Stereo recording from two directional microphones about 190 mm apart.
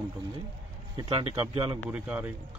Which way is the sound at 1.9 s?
5° right (ahead or behind).